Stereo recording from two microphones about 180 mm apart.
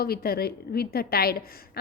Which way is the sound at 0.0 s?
55° left (ahead or behind).